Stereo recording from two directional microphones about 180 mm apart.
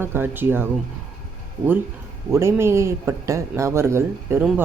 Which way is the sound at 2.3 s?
15° right (ahead or behind).